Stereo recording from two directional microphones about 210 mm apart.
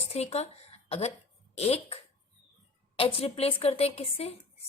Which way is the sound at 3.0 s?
25° left (ahead or behind).